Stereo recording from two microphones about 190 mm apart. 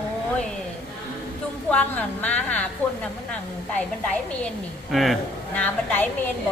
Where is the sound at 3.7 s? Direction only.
5° left (ahead or behind).